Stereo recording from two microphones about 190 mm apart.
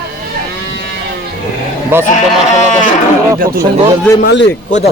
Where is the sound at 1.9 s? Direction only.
10° right (ahead or behind).